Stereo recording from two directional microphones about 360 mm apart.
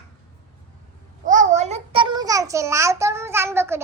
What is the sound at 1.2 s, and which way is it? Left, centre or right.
A child's voice, right.